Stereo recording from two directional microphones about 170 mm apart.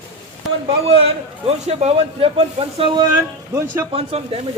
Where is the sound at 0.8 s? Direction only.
35° right (ahead or behind).